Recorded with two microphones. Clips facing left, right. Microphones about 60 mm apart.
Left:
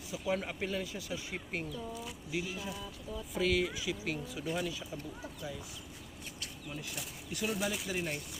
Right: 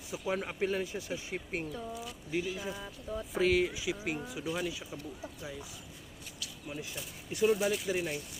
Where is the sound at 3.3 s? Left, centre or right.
Right.